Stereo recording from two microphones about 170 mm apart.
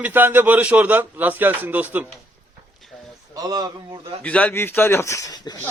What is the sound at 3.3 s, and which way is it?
Speech, 20° right (ahead or behind).